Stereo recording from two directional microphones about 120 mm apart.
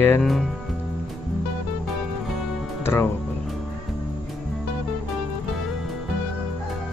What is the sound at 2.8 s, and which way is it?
Music, 20° left (ahead or behind).